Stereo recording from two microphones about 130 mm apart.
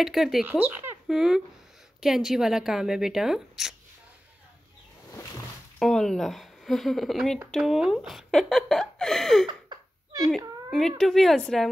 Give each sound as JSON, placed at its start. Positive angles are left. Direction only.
{"t": 0.0, "sound": "speech", "side_deg": 0}
{"t": 5.8, "sound": "speech", "side_deg": 5}
{"t": 9.5, "sound": "a sound", "side_deg": -30}
{"t": 10.3, "sound": "speech", "side_deg": 0}